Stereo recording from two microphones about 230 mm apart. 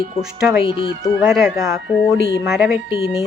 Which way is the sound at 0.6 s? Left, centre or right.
Left.